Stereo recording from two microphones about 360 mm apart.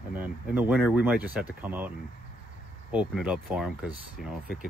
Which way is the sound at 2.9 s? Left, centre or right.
Centre.